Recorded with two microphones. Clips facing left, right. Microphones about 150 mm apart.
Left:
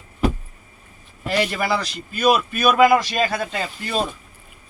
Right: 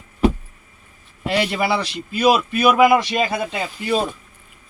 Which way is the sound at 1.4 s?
25° right (ahead or behind).